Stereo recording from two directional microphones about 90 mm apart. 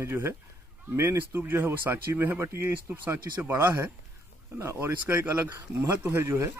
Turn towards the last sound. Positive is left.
turn(degrees=-30)  # may be behind; listen again after turning